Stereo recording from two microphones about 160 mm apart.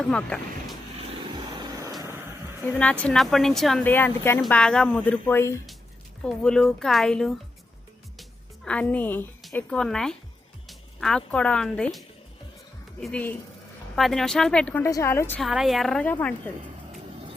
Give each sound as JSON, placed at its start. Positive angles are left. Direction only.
{"t": 0.1, "sound": "speech", "side_deg": 5}
{"t": 2.7, "sound": "speech", "side_deg": 10}
{"t": 3.8, "sound": "speech", "side_deg": 10}
{"t": 6.2, "sound": "speech", "side_deg": 5}
{"t": 8.6, "sound": "speech", "side_deg": 10}
{"t": 14.8, "sound": "speech", "side_deg": 20}
{"t": 15.4, "sound": "speech", "side_deg": 0}